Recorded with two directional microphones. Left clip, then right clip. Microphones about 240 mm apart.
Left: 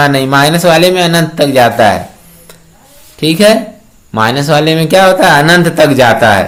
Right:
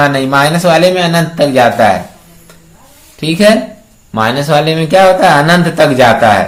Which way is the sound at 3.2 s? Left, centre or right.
Left.